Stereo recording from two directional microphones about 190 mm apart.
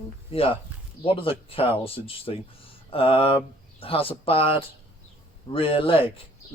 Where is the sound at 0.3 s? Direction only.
30° left (ahead or behind).